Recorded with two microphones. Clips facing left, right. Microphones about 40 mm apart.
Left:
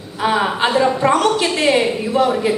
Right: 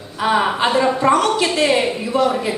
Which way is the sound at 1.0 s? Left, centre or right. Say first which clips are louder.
Right 1 dB; left.